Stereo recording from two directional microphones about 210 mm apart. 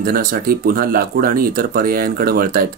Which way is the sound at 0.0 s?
45° right (ahead or behind).